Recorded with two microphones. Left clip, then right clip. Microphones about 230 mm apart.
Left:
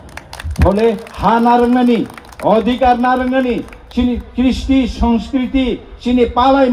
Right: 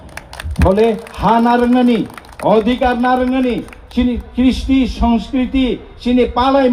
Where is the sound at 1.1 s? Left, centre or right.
Right.